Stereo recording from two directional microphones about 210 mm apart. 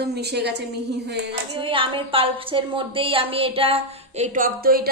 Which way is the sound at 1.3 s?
25° right (ahead or behind).